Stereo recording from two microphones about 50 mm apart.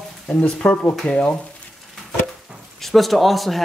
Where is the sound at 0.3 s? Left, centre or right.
Left.